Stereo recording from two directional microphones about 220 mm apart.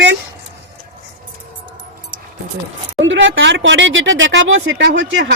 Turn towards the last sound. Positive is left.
turn(degrees=-55)  # may be behind; listen again after turning